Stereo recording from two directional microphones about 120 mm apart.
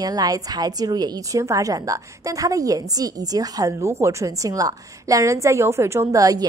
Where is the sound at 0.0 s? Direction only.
30° right (ahead or behind).